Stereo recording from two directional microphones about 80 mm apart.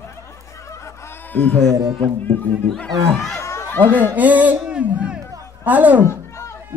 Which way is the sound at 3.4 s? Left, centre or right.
Left.